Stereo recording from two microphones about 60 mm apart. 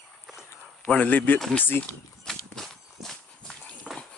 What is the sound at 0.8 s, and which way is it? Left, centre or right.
Speech, left.